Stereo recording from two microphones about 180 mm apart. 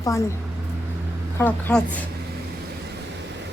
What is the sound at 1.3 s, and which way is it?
Speech, 10° left (ahead or behind).